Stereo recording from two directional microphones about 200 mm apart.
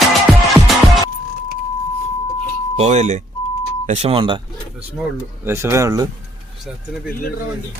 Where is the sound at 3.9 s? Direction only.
30° right (ahead or behind).